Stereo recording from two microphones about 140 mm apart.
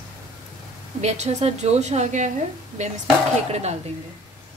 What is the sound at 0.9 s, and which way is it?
A woman's voice, 55° right (ahead or behind).